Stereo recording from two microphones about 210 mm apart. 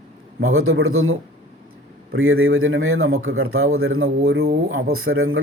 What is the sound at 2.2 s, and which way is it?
Speech, 75° right (ahead or behind).